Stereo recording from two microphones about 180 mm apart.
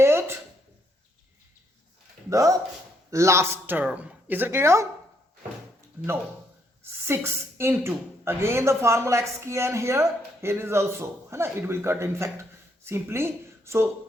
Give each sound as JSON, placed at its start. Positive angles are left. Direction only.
{"t": 0.0, "sound": "a sound", "side_deg": -15}
{"t": 2.3, "sound": "speech", "side_deg": -20}
{"t": 7.1, "sound": "speech", "side_deg": -15}